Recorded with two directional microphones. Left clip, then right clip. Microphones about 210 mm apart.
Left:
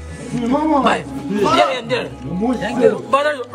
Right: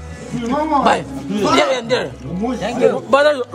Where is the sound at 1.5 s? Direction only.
50° right (ahead or behind).